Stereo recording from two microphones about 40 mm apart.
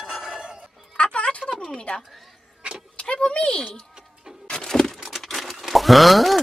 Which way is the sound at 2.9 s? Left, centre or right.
Left.